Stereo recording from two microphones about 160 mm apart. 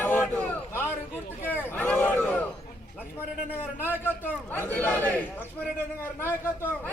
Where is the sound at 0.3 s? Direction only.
10° left (ahead or behind).